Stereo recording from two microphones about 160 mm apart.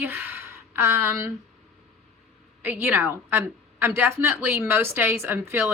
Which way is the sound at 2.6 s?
10° right (ahead or behind).